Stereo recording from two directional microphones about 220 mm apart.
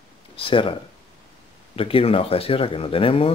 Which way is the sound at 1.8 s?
25° left (ahead or behind).